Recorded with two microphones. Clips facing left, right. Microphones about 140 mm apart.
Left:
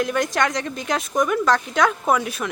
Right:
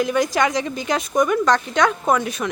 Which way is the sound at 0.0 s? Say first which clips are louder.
Right 2 dB; centre (ahead or behind).